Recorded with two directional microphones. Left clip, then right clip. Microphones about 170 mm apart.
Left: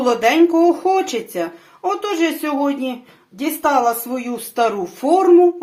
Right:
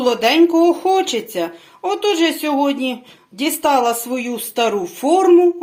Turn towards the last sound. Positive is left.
turn(degrees=-30)  # may be behind; listen again after turning